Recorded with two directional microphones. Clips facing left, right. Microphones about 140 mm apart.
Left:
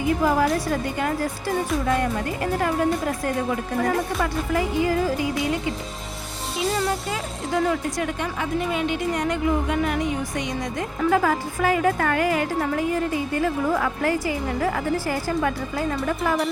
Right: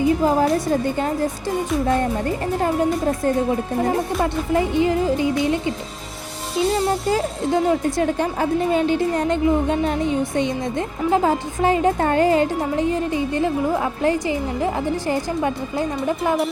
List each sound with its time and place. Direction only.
0.2 s a woman's voice: 25° right (ahead or behind)